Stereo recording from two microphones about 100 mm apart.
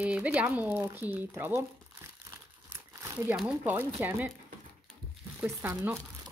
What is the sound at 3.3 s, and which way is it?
Speech, 10° right (ahead or behind).